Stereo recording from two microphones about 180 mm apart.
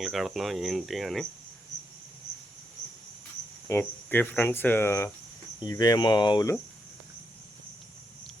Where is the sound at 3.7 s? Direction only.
10° left (ahead or behind).